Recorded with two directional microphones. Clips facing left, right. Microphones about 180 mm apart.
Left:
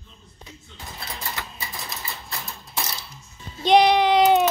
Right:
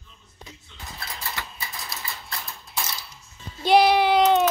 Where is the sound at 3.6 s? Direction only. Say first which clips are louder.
Left 1 dB; 5° right (ahead or behind).